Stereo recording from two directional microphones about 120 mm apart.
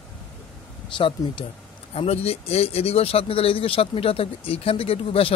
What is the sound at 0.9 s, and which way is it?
Speech, 45° left (ahead or behind).